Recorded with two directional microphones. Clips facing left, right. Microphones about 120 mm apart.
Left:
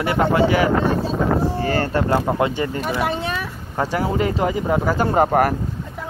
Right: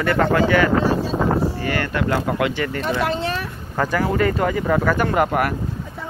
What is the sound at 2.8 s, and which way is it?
Speech, 10° left (ahead or behind).